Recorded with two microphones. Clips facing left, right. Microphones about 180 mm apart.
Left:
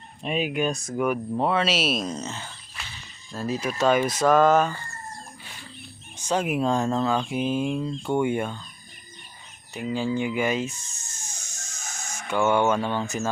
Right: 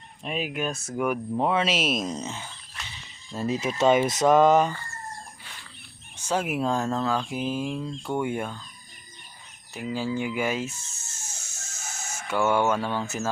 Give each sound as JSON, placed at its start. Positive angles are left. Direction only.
{"t": 0.2, "sound": "speech", "side_deg": 0}
{"t": 6.2, "sound": "speech", "side_deg": -5}
{"t": 9.7, "sound": "speech", "side_deg": -5}